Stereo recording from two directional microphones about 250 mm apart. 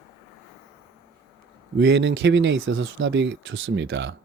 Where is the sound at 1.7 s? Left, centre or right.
Right.